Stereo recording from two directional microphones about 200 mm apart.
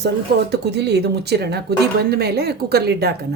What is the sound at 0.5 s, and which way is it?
A woman's voice, 55° right (ahead or behind).